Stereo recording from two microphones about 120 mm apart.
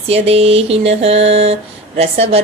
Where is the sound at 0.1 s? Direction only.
55° right (ahead or behind).